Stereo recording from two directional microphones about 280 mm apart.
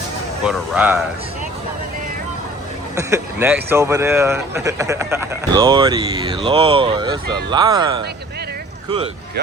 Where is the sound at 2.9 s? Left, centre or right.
Centre.